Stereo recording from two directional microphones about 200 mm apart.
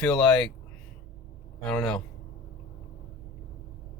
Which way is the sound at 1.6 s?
5° left (ahead or behind).